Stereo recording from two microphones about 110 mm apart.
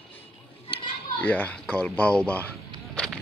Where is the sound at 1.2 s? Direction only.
15° left (ahead or behind).